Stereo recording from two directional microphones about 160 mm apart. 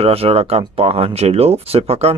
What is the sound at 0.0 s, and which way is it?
Speech, 40° right (ahead or behind).